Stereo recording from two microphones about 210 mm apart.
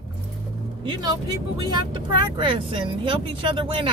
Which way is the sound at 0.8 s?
20° right (ahead or behind).